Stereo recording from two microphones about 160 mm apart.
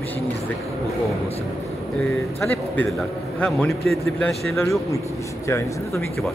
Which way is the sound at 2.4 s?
10° left (ahead or behind).